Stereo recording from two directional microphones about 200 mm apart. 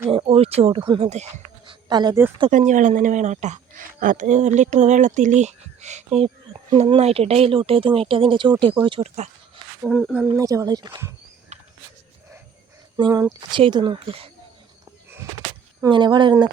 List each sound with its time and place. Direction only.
0.1 s speech: 30° right (ahead or behind)
1.9 s speech: 20° right (ahead or behind)
2.5 s a woman's voice: 40° right (ahead or behind)
9.8 s speech: centre (ahead or behind)
10.2 s speech: 15° right (ahead or behind)
13.0 s speech: 20° right (ahead or behind)
15.8 s speech: 20° right (ahead or behind)